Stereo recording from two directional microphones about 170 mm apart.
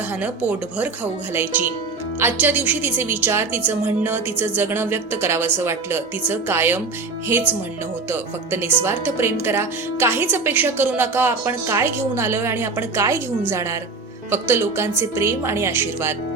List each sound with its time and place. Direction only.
1.3 s speech: 10° right (ahead or behind)